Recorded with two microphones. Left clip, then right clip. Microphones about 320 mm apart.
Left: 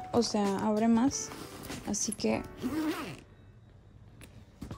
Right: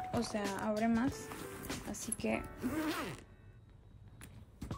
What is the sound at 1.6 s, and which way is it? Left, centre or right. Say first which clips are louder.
Vehicle: left 7 dB; centre.